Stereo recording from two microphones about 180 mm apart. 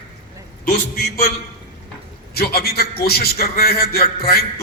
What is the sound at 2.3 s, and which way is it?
A man's voice, 60° left (ahead or behind).